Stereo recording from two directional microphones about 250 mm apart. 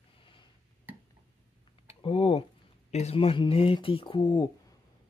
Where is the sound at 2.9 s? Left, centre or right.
Left.